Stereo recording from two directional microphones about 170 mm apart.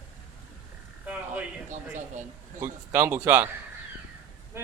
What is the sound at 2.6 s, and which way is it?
Speech, 15° right (ahead or behind).